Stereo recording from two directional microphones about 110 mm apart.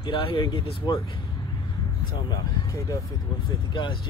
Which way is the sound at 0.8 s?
40° left (ahead or behind).